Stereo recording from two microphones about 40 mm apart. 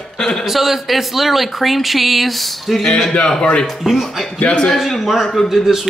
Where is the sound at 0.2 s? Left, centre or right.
Centre.